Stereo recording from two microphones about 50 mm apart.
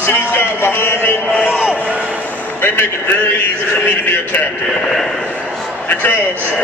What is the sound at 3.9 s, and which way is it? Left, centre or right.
Speech, left.